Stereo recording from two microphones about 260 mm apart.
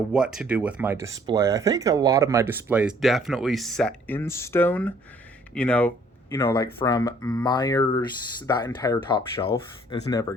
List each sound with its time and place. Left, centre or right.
0.1 s speech: centre